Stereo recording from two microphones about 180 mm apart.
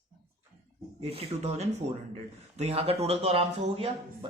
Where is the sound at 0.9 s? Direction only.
35° right (ahead or behind).